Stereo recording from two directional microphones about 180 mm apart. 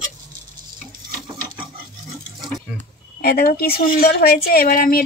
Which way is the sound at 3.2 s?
55° left (ahead or behind).